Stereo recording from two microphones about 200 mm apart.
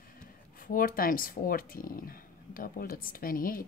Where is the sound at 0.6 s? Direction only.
45° left (ahead or behind).